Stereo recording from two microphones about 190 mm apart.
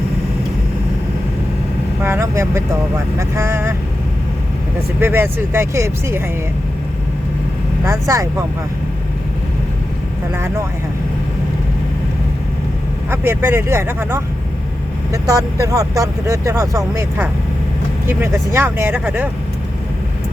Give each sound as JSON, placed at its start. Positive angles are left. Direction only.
{"t": 2.0, "sound": "vehicle", "side_deg": -15}
{"t": 3.2, "sound": "speech", "side_deg": -15}
{"t": 4.9, "sound": "speech", "side_deg": -10}
{"t": 7.9, "sound": "speech", "side_deg": -15}
{"t": 13.1, "sound": "speech", "side_deg": -10}